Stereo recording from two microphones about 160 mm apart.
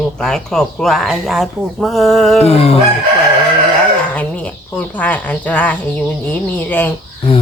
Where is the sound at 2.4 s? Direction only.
40° left (ahead or behind).